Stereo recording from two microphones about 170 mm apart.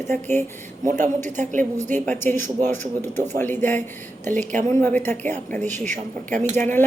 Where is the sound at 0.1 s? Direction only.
10° left (ahead or behind).